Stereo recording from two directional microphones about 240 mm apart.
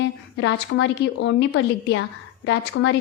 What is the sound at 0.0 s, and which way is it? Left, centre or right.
A woman's voice, left.